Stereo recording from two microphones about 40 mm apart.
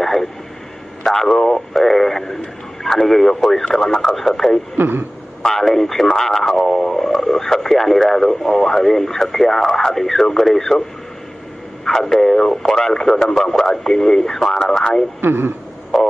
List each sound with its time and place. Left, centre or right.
0.0 s a sound: centre
1.0 s speech: centre
4.7 s a man's voice: right
5.4 s speech: centre
11.8 s speech: centre
15.1 s a man's voice: right